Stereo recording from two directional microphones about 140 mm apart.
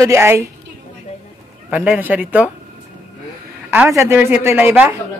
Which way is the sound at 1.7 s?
10° right (ahead or behind).